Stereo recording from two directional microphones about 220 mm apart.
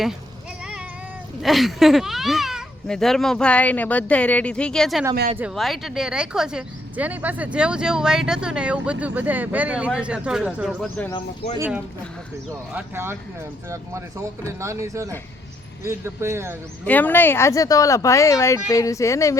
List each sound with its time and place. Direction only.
1.4 s speech: centre (ahead or behind)
11.5 s speech: 10° right (ahead or behind)
16.8 s speech: 5° left (ahead or behind)